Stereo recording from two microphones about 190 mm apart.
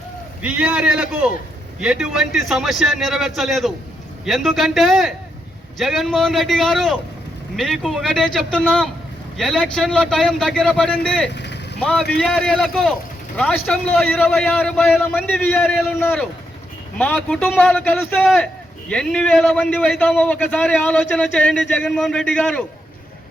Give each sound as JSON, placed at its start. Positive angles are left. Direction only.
{"t": 0.4, "sound": "a man's voice", "side_deg": -5}
{"t": 11.3, "sound": "vehicle", "side_deg": 65}
{"t": 11.8, "sound": "a man's voice", "side_deg": 5}